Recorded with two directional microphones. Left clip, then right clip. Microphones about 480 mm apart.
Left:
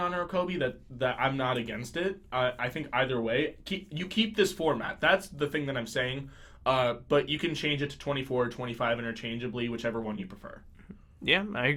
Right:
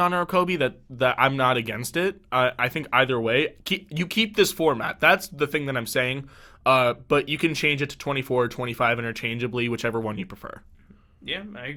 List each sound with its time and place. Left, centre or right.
0.0 s speech: right
11.3 s speech: left